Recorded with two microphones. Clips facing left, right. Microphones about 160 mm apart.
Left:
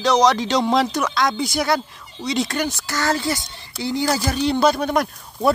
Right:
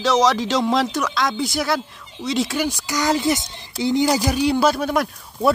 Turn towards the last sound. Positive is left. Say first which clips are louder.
# even
turn(degrees=-5)  # may be behind; listen again after turning